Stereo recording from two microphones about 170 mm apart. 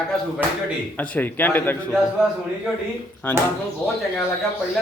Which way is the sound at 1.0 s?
10° left (ahead or behind).